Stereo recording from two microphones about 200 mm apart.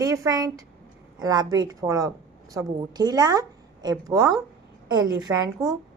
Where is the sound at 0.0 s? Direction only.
15° right (ahead or behind).